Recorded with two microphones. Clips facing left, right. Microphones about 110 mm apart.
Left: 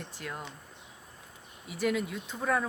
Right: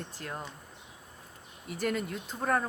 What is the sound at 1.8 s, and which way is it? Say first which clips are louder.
Speech: left 2 dB; 45° right (ahead or behind).